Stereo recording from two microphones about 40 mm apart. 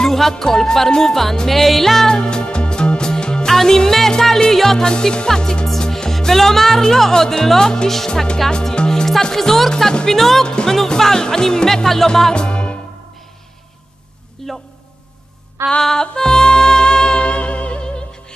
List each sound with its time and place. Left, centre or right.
0.0 s music: centre
3.4 s speech: centre
4.1 s music: centre
10.4 s music: centre
11.0 s music: centre; by 12.7 s left
14.4 s a sound: centre
15.8 s music: centre